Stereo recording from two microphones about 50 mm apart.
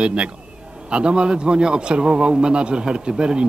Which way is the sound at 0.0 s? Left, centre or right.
Right.